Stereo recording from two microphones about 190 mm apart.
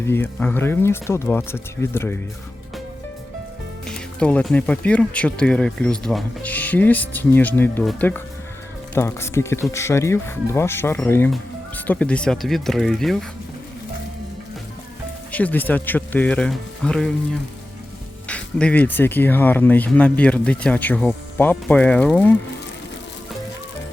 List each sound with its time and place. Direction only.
0.0 s speech: 10° left (ahead or behind)
3.8 s speech: 5° left (ahead or behind)
15.3 s speech: 10° left (ahead or behind)
18.3 s speech: 5° left (ahead or behind)